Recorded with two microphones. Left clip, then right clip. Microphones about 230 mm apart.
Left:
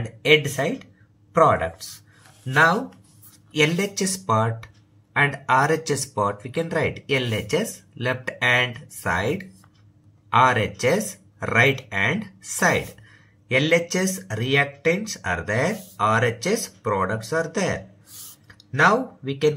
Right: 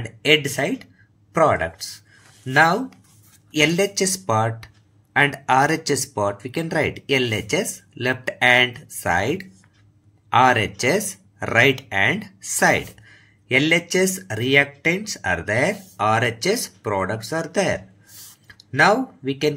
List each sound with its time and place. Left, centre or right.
0.3 s speech: right